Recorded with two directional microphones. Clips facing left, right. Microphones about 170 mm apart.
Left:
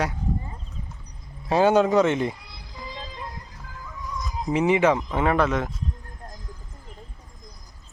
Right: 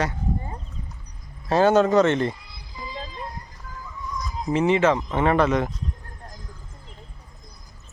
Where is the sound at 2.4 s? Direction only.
70° left (ahead or behind).